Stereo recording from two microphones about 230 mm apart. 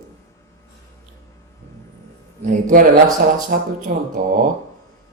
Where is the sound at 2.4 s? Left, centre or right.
Right.